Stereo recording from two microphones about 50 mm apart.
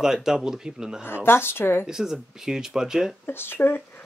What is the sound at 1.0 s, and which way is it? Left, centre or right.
Speech, left.